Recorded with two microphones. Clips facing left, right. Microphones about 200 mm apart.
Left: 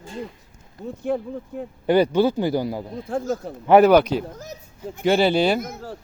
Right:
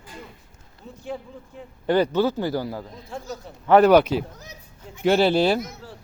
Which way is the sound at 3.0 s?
50° left (ahead or behind).